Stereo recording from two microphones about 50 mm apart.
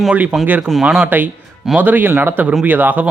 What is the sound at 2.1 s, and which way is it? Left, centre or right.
Speech, right.